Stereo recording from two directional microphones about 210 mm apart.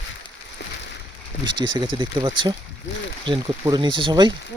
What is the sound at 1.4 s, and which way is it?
Speech, 20° right (ahead or behind).